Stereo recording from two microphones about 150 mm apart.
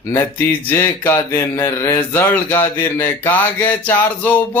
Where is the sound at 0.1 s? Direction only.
15° left (ahead or behind).